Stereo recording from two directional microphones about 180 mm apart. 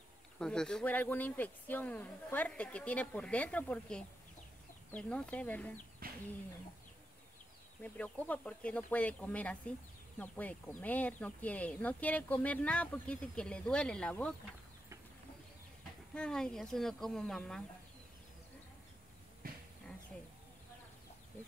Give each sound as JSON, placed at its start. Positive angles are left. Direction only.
{"t": 0.4, "sound": "speech", "side_deg": 5}
{"t": 6.0, "sound": "bird", "side_deg": -55}
{"t": 7.8, "sound": "speech", "side_deg": 10}
{"t": 16.2, "sound": "speech", "side_deg": 5}
{"t": 19.4, "sound": "a sound", "side_deg": -50}